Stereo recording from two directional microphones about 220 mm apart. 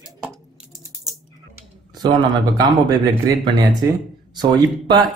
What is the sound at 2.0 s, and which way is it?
Speech, 20° right (ahead or behind).